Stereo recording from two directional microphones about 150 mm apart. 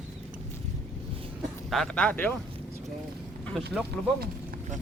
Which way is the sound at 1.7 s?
5° left (ahead or behind).